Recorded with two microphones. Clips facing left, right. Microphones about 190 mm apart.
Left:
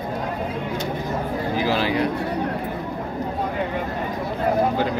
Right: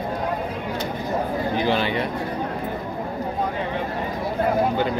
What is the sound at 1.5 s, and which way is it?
Speech, centre (ahead or behind).